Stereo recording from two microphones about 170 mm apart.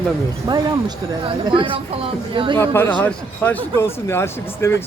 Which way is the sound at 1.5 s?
30° right (ahead or behind).